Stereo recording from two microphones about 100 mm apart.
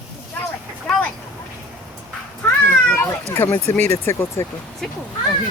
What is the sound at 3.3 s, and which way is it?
Speech, 25° left (ahead or behind).